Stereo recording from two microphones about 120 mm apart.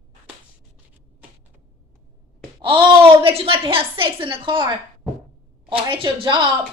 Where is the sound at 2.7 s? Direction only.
50° right (ahead or behind).